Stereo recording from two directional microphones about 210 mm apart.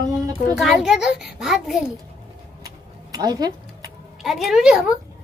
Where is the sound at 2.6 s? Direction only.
15° right (ahead or behind).